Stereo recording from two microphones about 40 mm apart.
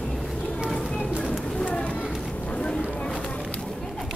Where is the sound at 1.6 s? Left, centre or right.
Left.